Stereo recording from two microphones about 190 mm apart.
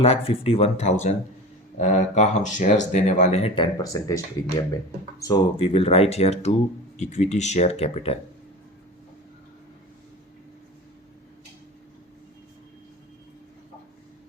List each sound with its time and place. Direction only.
0.0 s speech: 30° left (ahead or behind)
5.2 s speech: 25° left (ahead or behind)